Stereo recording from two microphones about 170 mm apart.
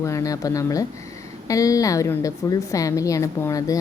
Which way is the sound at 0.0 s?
20° left (ahead or behind).